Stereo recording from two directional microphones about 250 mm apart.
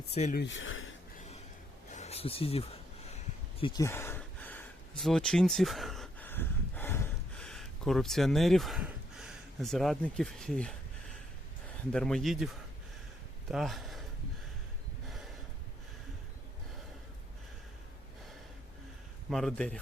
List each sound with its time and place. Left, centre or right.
0.1 s speech: left
0.4 s speech: left
1.9 s a sound: left; by 10.8 s centre
11.9 s speech: centre
13.5 s speech: centre
19.3 s speech: centre